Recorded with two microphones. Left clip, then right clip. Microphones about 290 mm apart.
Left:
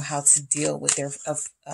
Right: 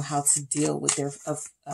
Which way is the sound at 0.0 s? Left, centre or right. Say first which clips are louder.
Left 3 dB; left.